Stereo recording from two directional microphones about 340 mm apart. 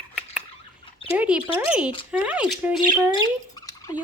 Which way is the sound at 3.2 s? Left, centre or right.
Centre.